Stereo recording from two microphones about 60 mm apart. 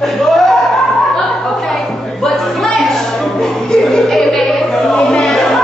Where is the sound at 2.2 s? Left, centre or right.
Centre.